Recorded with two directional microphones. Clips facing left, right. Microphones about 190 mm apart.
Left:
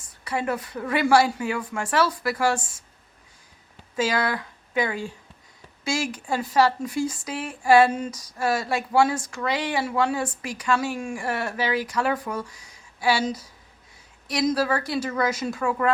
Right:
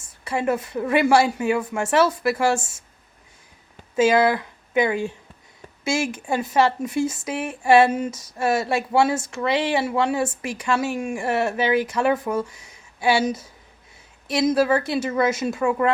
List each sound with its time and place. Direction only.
0.0 s speech: 25° right (ahead or behind)
3.9 s speech: 25° right (ahead or behind)